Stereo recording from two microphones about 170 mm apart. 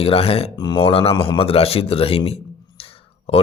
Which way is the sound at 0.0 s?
35° left (ahead or behind).